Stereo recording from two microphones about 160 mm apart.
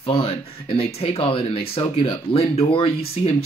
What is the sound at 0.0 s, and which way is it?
Speech, 35° left (ahead or behind).